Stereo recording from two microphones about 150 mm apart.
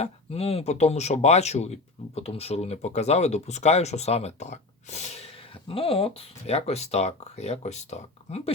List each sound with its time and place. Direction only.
0.0 s speech: 40° left (ahead or behind)
5.6 s speech: 40° left (ahead or behind)